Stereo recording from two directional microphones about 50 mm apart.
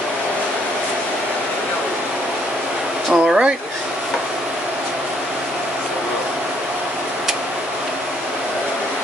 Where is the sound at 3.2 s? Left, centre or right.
Right.